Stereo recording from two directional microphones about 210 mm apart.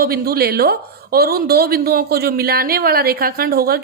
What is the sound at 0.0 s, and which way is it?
A woman's voice, 45° right (ahead or behind).